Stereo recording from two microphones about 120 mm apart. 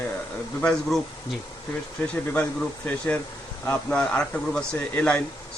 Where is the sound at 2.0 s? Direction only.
15° left (ahead or behind).